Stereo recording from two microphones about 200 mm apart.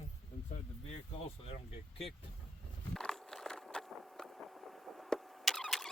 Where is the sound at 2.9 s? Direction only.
5° left (ahead or behind).